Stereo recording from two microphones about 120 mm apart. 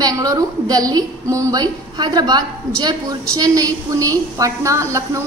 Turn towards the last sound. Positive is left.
turn(degrees=-25)  # may be behind; listen again after turning